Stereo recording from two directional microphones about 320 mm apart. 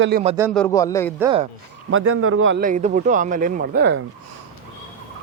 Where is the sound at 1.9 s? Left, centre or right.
Right.